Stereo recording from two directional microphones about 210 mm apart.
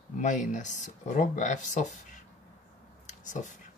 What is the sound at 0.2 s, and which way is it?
Speech, 35° left (ahead or behind).